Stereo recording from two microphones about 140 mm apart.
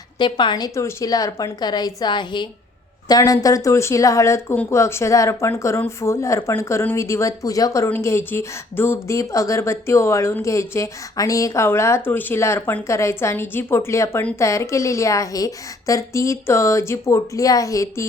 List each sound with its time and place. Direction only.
0.2 s speech: 35° left (ahead or behind)